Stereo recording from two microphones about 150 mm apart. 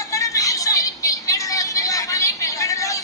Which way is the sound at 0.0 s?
20° left (ahead or behind).